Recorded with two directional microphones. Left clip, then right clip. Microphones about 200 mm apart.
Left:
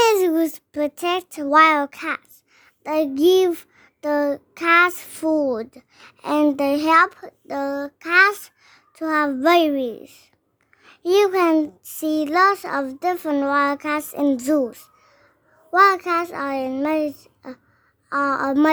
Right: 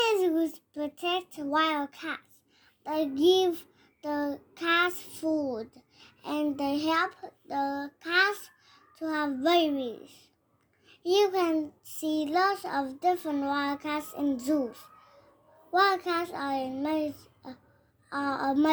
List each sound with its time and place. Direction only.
0.0 s a child's voice: 45° left (ahead or behind)